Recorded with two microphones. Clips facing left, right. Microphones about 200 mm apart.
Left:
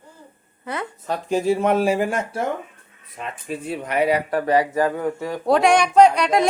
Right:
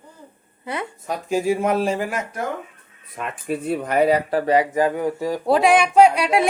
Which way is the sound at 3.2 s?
60° right (ahead or behind).